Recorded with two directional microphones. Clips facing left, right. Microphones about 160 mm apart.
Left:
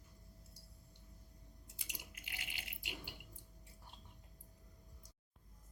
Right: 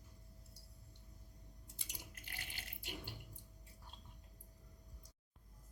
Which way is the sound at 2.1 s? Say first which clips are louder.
Left 1 dB; 15° left (ahead or behind).